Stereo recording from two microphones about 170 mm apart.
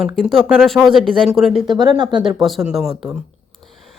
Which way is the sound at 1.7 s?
25° right (ahead or behind).